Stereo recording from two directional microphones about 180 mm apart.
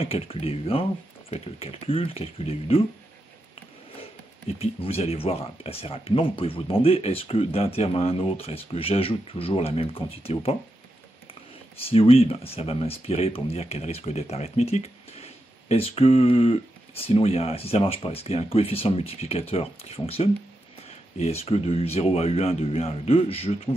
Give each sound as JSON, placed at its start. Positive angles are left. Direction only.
{"t": 0.0, "sound": "speech", "side_deg": 30}
{"t": 4.6, "sound": "speech", "side_deg": 35}
{"t": 11.8, "sound": "speech", "side_deg": 30}